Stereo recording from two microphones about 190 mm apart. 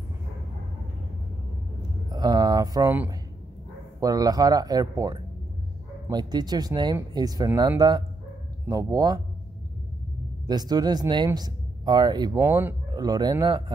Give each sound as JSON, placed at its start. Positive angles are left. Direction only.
{"t": 2.0, "sound": "speech", "side_deg": -20}
{"t": 10.4, "sound": "speech", "side_deg": -20}